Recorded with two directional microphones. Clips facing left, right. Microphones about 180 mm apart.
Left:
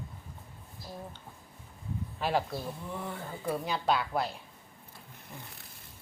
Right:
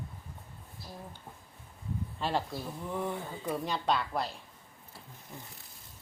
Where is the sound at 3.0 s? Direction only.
20° right (ahead or behind).